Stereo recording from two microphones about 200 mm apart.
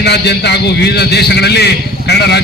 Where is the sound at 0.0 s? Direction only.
55° left (ahead or behind).